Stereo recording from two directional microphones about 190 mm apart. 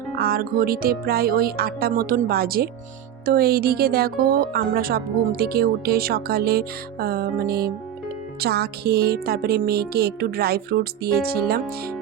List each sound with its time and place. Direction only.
0.2 s speech: 50° right (ahead or behind)
8.4 s music: 55° right (ahead or behind)